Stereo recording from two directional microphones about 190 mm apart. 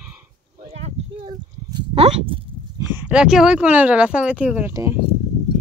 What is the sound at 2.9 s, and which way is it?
Speech, 5° right (ahead or behind).